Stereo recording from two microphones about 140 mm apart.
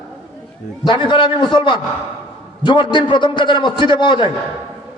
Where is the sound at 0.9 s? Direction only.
35° left (ahead or behind).